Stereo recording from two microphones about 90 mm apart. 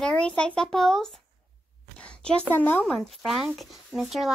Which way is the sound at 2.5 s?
20° left (ahead or behind).